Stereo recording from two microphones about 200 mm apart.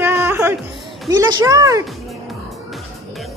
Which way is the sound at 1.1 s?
15° right (ahead or behind).